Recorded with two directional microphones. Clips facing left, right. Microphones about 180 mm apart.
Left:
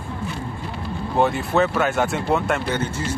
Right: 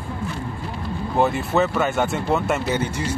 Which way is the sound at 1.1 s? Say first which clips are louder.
Even; centre (ahead or behind).